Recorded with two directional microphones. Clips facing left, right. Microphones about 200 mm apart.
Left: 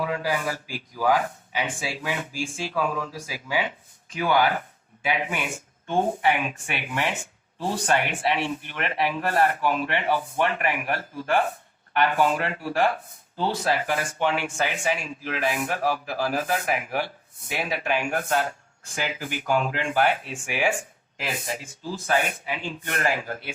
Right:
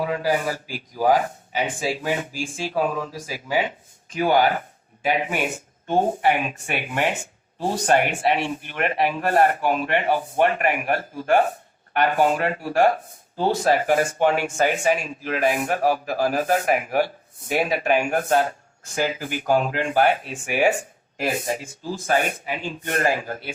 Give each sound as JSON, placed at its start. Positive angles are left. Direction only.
{"t": 0.0, "sound": "a man's voice", "side_deg": -40}